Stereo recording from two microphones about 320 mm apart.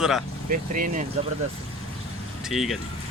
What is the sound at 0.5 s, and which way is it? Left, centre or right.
Speech, right.